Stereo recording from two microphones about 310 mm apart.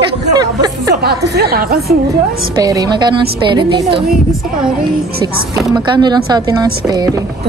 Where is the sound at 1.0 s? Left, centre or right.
Right.